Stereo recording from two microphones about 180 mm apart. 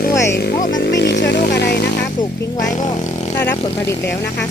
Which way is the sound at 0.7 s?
75° left (ahead or behind).